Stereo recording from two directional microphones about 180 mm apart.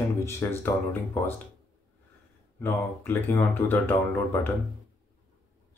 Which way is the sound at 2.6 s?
10° left (ahead or behind).